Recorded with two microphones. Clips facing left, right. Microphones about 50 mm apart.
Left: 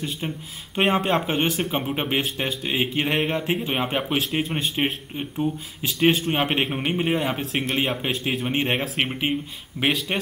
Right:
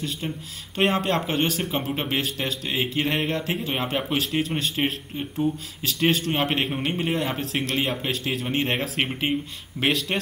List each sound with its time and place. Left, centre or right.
0.7 s a man's voice: centre
8.8 s a man's voice: centre